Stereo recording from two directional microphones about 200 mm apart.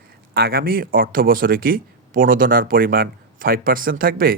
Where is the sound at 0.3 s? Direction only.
50° right (ahead or behind).